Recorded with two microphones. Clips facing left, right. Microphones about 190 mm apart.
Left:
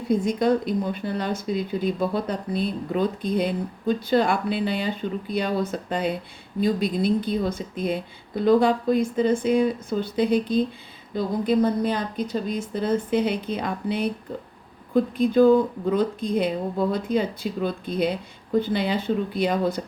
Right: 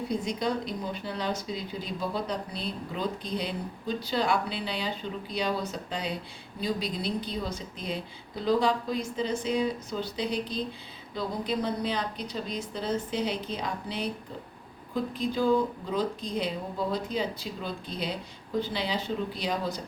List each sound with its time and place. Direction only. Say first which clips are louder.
0.1 s speech: left 11 dB; 50° left (ahead or behind)